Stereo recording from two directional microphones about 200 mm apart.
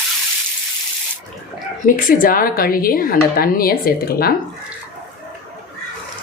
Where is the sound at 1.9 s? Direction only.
45° left (ahead or behind).